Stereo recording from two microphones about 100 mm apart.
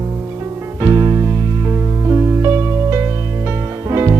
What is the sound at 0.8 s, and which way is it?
Music, 30° right (ahead or behind).